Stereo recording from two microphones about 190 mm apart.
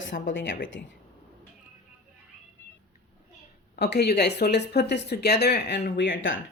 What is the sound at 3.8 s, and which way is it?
Speech, 60° left (ahead or behind).